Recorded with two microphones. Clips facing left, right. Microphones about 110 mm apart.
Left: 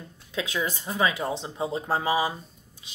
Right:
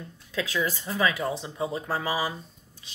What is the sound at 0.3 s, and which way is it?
Speech, 20° left (ahead or behind).